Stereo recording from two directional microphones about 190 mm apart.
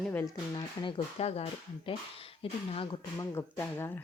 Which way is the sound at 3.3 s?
15° left (ahead or behind).